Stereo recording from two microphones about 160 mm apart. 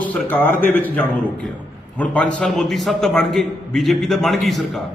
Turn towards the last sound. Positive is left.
turn(degrees=0)  # may be behind; listen again after turning